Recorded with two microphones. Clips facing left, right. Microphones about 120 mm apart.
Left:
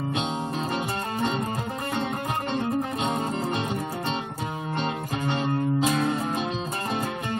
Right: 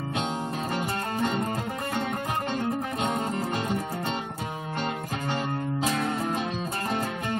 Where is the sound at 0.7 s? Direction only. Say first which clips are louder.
Even; 25° left (ahead or behind).